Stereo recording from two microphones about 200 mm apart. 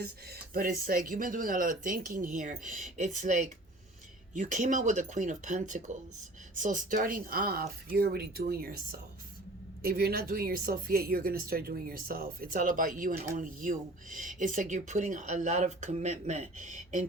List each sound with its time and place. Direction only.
0.0 s speech: 50° right (ahead or behind)